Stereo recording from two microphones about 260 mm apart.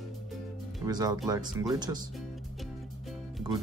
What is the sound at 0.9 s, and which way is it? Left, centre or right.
Speech, centre.